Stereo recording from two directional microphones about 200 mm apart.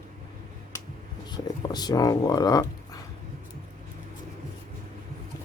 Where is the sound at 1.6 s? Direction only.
20° left (ahead or behind).